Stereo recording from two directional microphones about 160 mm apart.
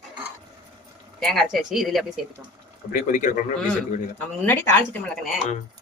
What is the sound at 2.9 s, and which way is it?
Speech, 55° left (ahead or behind).